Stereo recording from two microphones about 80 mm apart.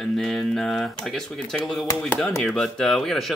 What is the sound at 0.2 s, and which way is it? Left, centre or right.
Speech, centre.